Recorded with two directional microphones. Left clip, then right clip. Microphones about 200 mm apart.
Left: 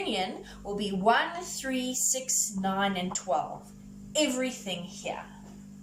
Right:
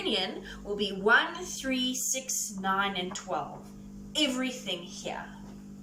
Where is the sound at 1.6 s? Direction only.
25° left (ahead or behind).